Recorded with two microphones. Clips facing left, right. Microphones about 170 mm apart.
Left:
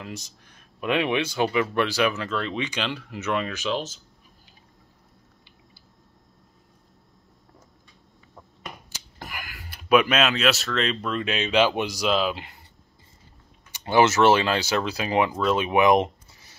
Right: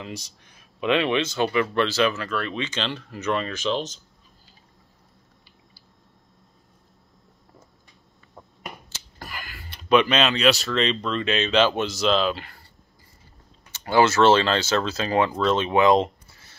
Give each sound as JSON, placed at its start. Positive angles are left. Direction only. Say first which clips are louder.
{"t": 0.0, "sound": "speech", "louder": "right 1 dB", "side_deg": 0}
{"t": 8.9, "sound": "speech", "louder": "even", "side_deg": 15}
{"t": 13.7, "sound": "speech", "louder": "even", "side_deg": 15}